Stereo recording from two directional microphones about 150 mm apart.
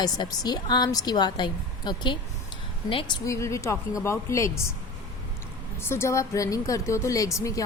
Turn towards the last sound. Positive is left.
turn(degrees=20)  # may be behind; listen again after turning